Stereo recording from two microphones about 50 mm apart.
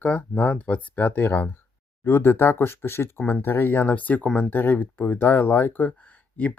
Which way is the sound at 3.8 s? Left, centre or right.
Left.